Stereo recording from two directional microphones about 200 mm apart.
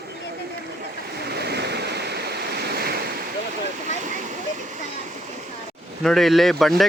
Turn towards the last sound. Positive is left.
turn(degrees=0)  # may be behind; listen again after turning